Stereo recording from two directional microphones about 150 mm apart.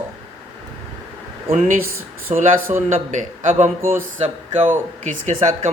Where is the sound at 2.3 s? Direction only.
45° right (ahead or behind).